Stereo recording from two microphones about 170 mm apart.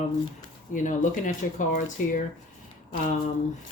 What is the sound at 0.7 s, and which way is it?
Speech, 50° left (ahead or behind).